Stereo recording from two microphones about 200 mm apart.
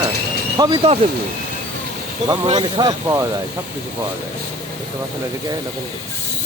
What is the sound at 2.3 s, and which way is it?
Speech, 25° right (ahead or behind).